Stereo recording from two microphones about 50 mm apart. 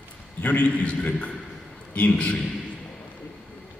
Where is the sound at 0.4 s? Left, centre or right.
Left.